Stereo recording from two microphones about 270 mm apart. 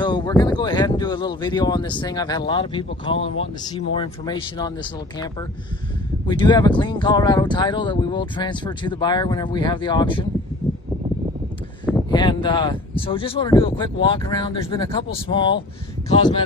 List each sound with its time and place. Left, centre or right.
0.0 s speech: centre
6.2 s speech: centre
12.1 s speech: centre